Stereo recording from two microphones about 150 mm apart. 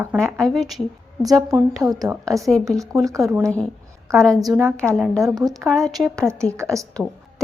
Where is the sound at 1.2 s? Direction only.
25° right (ahead or behind).